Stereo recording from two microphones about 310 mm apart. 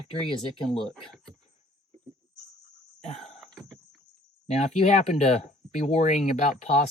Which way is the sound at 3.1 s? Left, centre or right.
Centre.